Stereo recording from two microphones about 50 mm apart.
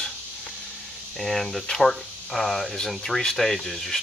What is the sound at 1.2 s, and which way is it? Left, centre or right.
Speech, centre.